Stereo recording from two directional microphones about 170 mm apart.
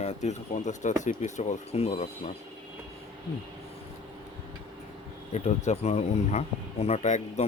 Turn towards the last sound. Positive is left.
turn(degrees=40)  # may be behind; listen again after turning